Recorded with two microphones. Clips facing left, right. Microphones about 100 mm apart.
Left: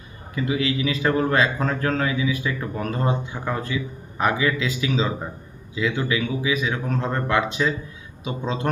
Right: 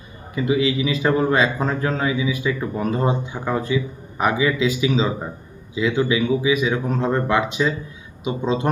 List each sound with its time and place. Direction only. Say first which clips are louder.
0.3 s a man's voice: right 4 dB; 20° right (ahead or behind)